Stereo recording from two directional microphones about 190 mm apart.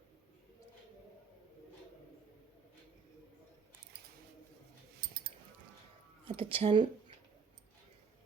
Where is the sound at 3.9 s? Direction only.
60° right (ahead or behind).